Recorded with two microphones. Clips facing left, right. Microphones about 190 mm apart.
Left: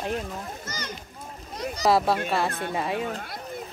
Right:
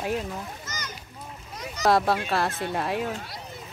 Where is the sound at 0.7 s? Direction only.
30° left (ahead or behind).